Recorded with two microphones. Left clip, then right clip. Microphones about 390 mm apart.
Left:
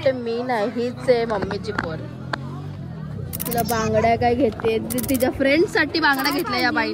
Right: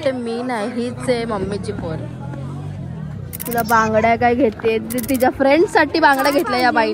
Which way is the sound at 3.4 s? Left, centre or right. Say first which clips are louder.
Right 7 dB; centre.